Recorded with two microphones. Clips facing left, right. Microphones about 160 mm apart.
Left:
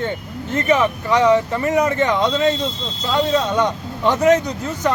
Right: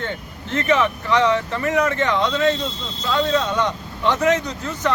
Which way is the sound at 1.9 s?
15° left (ahead or behind).